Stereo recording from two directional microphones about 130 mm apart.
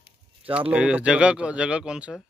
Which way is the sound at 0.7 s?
10° right (ahead or behind).